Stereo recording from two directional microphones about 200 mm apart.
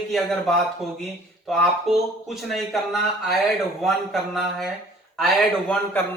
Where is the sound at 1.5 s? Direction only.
Centre (ahead or behind).